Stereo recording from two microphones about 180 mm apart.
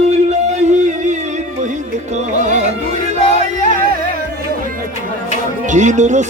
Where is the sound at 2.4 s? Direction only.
45° right (ahead or behind).